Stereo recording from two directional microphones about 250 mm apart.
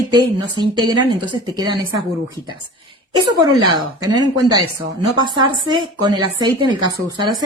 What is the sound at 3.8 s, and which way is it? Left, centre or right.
A woman's voice, centre.